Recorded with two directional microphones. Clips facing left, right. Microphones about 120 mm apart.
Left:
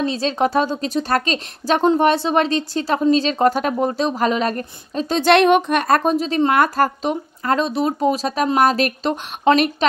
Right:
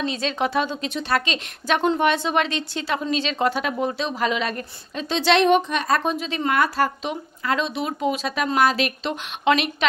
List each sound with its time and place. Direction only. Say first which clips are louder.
0.0 s speech: left 5 dB; 35° left (ahead or behind)
6.5 s speech: left 4 dB; 50° left (ahead or behind)